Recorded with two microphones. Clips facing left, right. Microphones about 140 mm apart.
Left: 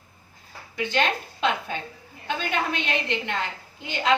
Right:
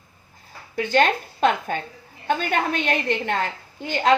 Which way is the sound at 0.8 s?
50° right (ahead or behind).